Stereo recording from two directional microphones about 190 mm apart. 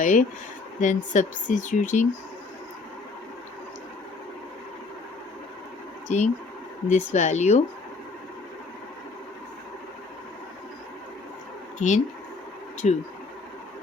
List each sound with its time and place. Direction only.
0.0 s speech: 40° left (ahead or behind)
6.1 s speech: 40° left (ahead or behind)
11.8 s speech: 40° left (ahead or behind)